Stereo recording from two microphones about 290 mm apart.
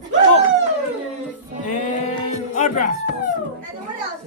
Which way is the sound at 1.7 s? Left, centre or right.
Left.